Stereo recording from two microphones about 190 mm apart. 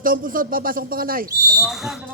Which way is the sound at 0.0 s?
45° right (ahead or behind).